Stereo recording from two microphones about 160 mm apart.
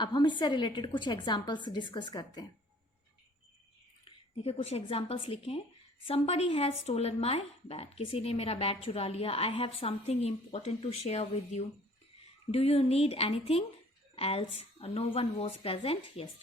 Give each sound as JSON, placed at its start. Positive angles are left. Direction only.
{"t": 0.0, "sound": "a woman's voice", "side_deg": 30}
{"t": 4.0, "sound": "a woman's voice", "side_deg": 40}